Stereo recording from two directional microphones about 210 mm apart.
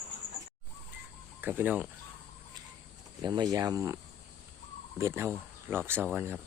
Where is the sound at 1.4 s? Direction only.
10° right (ahead or behind).